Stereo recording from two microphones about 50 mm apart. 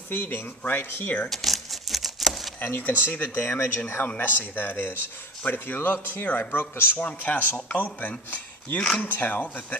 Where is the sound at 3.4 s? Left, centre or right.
Left.